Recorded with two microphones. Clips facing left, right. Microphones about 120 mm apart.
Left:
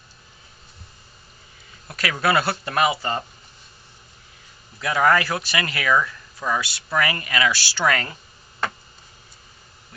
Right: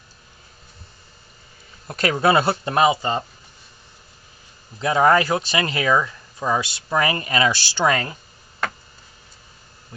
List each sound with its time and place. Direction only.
1.9 s speech: 30° right (ahead or behind)
4.8 s speech: 25° right (ahead or behind)